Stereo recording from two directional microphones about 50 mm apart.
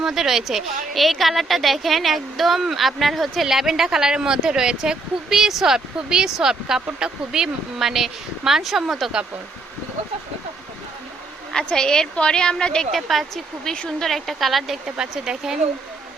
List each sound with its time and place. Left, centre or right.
0.0 s a woman's voice: centre
11.5 s a woman's voice: centre
12.9 s a woman's voice: centre
14.8 s speech: centre